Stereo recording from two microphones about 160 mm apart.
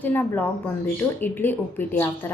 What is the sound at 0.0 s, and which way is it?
Speech, 10° left (ahead or behind).